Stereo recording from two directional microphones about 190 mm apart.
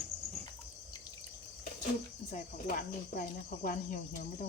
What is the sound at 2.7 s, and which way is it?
Speech, 45° left (ahead or behind).